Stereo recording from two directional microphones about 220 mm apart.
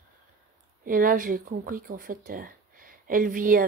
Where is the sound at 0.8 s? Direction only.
40° right (ahead or behind).